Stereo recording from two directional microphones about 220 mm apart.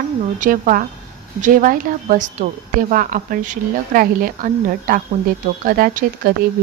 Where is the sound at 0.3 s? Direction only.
35° right (ahead or behind).